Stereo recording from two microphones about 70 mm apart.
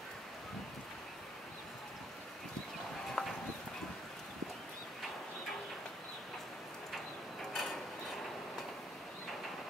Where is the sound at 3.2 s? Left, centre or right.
Centre.